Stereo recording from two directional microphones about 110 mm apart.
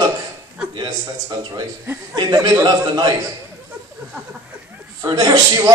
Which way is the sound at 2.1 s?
40° right (ahead or behind).